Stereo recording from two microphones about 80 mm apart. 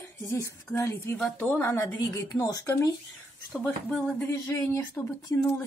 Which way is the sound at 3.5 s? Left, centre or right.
Centre.